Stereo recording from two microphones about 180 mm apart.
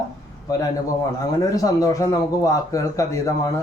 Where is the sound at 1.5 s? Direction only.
20° left (ahead or behind).